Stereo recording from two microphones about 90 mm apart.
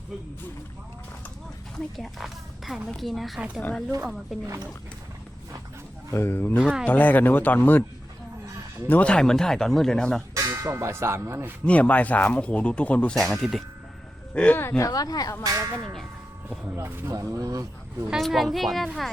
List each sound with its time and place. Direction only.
2.0 s a woman's voice: centre (ahead or behind)
3.6 s speech: 15° left (ahead or behind)
4.3 s a woman's voice: centre (ahead or behind)
6.1 s speech: 25° left (ahead or behind)
8.9 s speech: 15° left (ahead or behind)
10.3 s clang: 35° right (ahead or behind)
11.6 s speech: 15° left (ahead or behind)
13.1 s a woman's voice: 5° left (ahead or behind)
14.3 s speech: 20° left (ahead or behind)
14.8 s speech: 40° left (ahead or behind)
15.4 s speech: 35° right (ahead or behind)
16.7 s speech: 25° right (ahead or behind)
17.2 s speech: 40° right (ahead or behind)
18.1 s a woman's voice: centre (ahead or behind)